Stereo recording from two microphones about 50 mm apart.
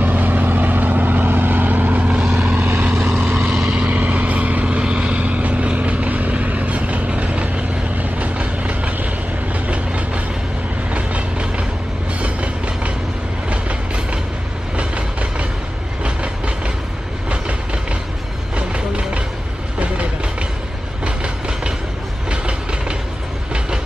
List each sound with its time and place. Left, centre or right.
0.0 s vehicle: right
2.0 s vehicle: right
2.4 s vehicle: right
3.0 s vehicle: centre
3.8 s vehicle: right
10.9 s train: right
14.8 s vehicle: right
16.0 s train: right
18.7 s vehicle: right
21.0 s train: centre